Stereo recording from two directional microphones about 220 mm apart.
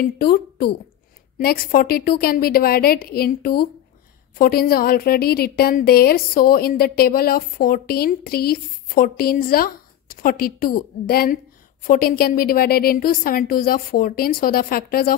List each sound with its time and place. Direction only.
0.0 s a woman's voice: 45° left (ahead or behind)